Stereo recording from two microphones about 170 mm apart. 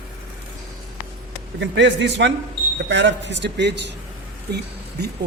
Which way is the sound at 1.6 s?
90° right.